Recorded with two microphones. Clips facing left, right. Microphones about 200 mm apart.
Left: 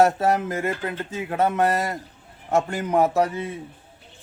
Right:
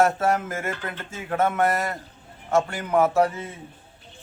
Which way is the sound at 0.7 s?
35° left (ahead or behind).